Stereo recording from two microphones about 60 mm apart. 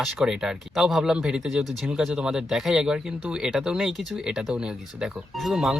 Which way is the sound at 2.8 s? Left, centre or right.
Centre.